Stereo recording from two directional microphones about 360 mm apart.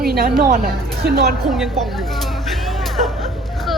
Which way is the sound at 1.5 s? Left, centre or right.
Centre.